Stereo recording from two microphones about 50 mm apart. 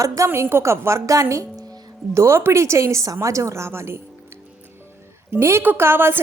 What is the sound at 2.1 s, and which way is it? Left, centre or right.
Speech, right.